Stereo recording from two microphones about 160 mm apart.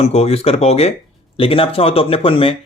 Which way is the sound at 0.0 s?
40° left (ahead or behind).